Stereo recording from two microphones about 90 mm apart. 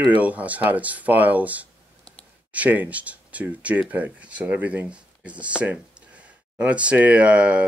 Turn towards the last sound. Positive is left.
turn(degrees=-15)  # may be behind; listen again after turning